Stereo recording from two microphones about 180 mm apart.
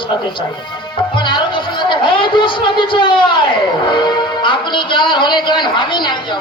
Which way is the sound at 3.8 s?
25° left (ahead or behind).